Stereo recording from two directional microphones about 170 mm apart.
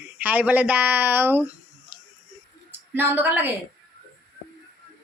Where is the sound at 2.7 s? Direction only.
10° right (ahead or behind).